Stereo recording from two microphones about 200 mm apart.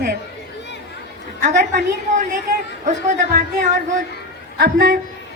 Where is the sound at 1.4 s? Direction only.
35° right (ahead or behind).